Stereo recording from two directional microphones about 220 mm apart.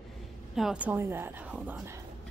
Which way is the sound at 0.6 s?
5° right (ahead or behind).